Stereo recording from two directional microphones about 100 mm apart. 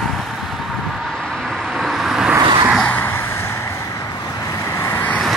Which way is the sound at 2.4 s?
50° right (ahead or behind).